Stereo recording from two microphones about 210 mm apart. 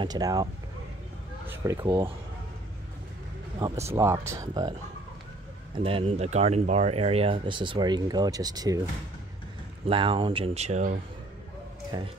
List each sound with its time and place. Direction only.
0.0 s speech: 20° right (ahead or behind)
1.5 s speech: 10° right (ahead or behind)
3.5 s speech: 20° right (ahead or behind)
5.8 s speech: 25° right (ahead or behind)
9.8 s speech: 25° right (ahead or behind)
11.9 s speech: 20° right (ahead or behind)